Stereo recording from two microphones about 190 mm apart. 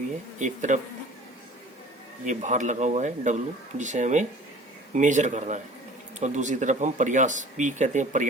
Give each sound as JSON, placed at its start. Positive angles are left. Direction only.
{"t": 0.3, "sound": "speech", "side_deg": -40}
{"t": 2.2, "sound": "speech", "side_deg": -40}